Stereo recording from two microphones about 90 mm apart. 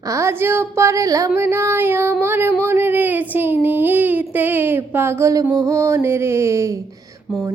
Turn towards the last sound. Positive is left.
turn(degrees=-5)  # may be behind; listen again after turning